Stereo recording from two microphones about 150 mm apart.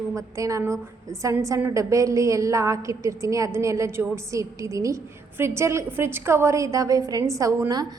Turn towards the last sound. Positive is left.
turn(degrees=-25)  # may be behind; listen again after turning